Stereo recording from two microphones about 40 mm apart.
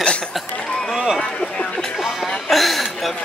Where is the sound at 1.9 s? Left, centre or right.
Centre.